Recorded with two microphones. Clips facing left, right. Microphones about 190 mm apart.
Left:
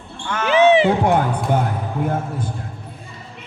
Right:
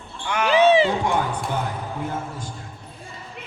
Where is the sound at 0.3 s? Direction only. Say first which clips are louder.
Left 2 dB; 15° right (ahead or behind).